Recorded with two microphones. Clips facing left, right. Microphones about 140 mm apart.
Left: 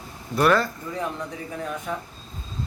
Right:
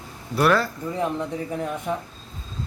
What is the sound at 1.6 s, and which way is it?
Speech, 20° right (ahead or behind).